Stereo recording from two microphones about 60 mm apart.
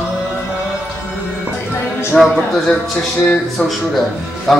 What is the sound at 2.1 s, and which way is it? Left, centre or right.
Speech, centre.